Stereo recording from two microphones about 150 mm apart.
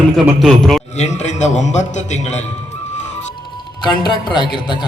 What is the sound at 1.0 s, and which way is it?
A man's voice, 50° left (ahead or behind).